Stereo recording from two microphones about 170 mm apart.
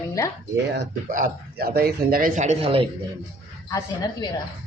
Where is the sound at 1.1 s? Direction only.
60° right (ahead or behind); by 2.8 s 35° right (ahead or behind).